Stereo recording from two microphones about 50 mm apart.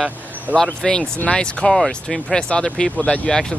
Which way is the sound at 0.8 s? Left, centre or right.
Centre.